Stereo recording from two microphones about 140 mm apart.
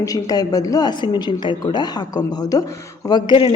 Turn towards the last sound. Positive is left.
turn(degrees=35)  # may be behind; listen again after turning